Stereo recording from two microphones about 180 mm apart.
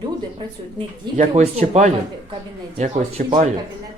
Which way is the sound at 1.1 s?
40° right (ahead or behind).